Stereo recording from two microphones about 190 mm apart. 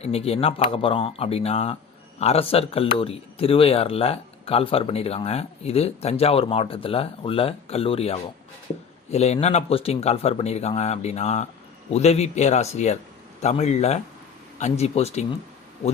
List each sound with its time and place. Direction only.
0.0 s speech: 30° left (ahead or behind)